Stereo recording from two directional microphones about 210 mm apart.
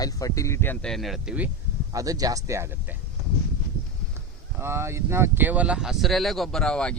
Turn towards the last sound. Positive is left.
turn(degrees=5)  # may be behind; listen again after turning